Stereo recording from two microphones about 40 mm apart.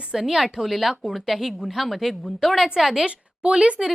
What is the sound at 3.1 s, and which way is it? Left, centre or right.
Speech, right.